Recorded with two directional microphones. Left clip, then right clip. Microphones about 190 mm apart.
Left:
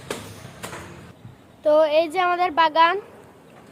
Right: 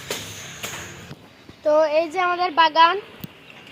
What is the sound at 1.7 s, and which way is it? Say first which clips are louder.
Speech: left 1 dB; 15° left (ahead or behind).